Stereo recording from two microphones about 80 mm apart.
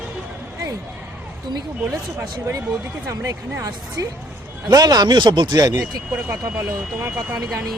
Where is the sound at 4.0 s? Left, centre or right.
Right.